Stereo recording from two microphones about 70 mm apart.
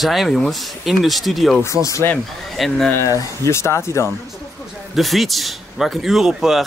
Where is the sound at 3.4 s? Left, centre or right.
Left.